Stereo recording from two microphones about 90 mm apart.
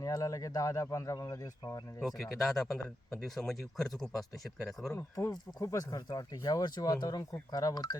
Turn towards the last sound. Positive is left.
turn(degrees=45)  # may be behind; listen again after turning